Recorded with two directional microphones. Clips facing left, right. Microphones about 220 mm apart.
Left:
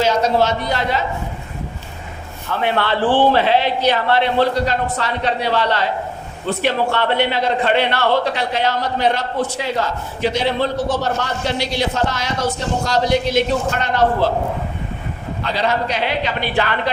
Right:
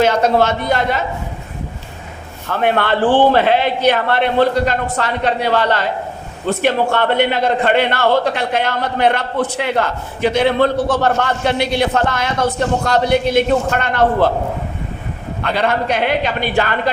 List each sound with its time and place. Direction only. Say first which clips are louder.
0.0 s a man's voice: right 3 dB; 55° right (ahead or behind)
2.5 s a man's voice: right 3 dB; 50° right (ahead or behind)
15.4 s a man's voice: right 2 dB; 55° right (ahead or behind)